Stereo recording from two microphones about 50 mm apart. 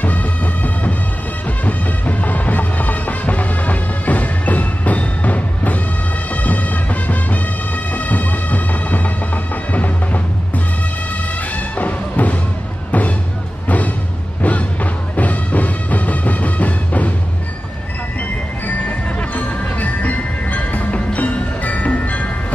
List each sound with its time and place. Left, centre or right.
0.0 s music: left
18.9 s music: left